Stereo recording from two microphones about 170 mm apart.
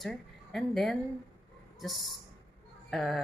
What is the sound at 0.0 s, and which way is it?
A woman's voice, centre (ahead or behind).